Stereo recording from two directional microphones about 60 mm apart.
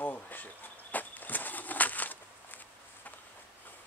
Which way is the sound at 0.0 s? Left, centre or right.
Left.